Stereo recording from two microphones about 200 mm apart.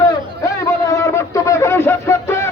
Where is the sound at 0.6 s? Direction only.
15° left (ahead or behind).